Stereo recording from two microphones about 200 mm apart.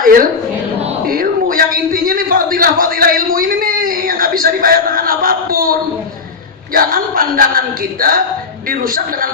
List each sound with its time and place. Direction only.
0.0 s a woman's voice: 45° right (ahead or behind)
1.0 s a sound: 45° right (ahead or behind)
6.7 s speech: 45° right (ahead or behind)
8.7 s speech: 45° right (ahead or behind)